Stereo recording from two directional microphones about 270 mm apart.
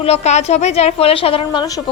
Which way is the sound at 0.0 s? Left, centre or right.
Left.